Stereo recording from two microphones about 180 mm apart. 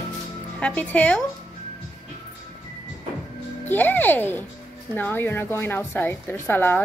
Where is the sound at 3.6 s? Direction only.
10° left (ahead or behind).